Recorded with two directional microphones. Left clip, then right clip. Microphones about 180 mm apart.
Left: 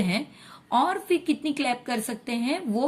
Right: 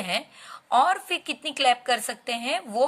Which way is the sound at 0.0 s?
30° right (ahead or behind).